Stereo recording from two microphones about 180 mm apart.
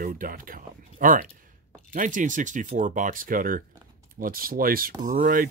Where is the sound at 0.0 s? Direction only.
50° right (ahead or behind).